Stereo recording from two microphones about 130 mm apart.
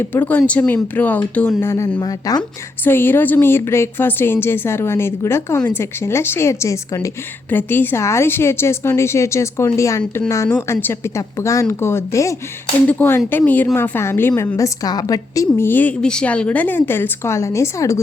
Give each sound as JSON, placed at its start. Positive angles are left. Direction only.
{"t": 0.0, "sound": "a woman's voice", "side_deg": 15}
{"t": 2.0, "sound": "a woman's voice", "side_deg": 30}
{"t": 2.8, "sound": "a woman's voice", "side_deg": 15}